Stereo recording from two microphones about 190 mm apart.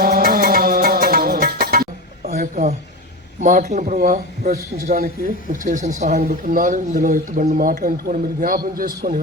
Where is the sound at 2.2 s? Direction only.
40° right (ahead or behind).